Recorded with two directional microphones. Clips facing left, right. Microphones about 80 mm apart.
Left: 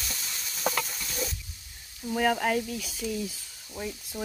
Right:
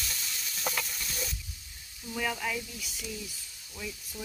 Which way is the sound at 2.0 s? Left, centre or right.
Left.